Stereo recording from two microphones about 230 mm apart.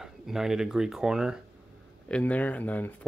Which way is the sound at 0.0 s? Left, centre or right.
Centre.